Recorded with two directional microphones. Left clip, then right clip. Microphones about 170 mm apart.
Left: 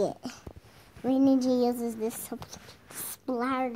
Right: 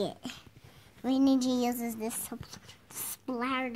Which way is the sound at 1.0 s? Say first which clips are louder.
Left 3 dB; 25° right (ahead or behind).